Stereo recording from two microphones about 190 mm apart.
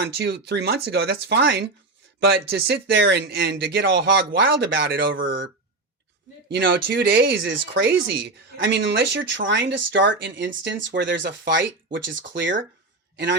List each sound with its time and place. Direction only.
0.0 s speech: 60° right (ahead or behind); by 5.4 s 85° right
6.5 s speech: 60° right (ahead or behind)